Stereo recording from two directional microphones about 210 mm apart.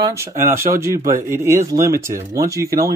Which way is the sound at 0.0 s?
15° right (ahead or behind).